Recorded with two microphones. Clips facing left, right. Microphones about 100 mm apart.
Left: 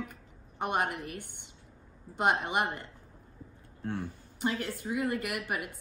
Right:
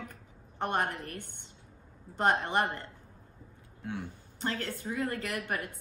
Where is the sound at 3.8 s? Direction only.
45° left (ahead or behind).